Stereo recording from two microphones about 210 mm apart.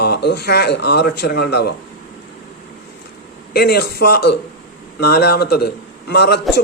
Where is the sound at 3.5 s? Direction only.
50° left (ahead or behind).